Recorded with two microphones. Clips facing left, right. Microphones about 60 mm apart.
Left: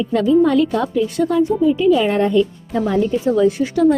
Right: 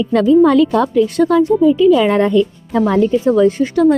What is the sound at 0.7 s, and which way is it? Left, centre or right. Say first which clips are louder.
Speech: right 5 dB; right.